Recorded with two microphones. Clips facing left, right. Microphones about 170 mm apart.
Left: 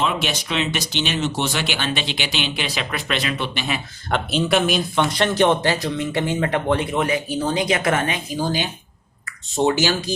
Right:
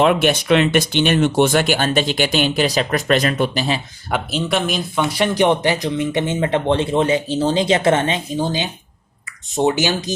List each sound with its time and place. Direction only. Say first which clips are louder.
0.0 s speech: right 8 dB; 55° right (ahead or behind); by 3.8 s 40° right (ahead or behind)
4.1 s speech: left 1 dB; centre (ahead or behind); by 10.2 s 20° right (ahead or behind)